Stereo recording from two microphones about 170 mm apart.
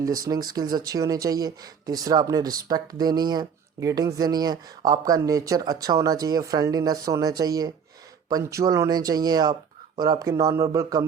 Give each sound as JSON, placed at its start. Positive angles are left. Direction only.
{"t": 0.5, "sound": "speech", "side_deg": -25}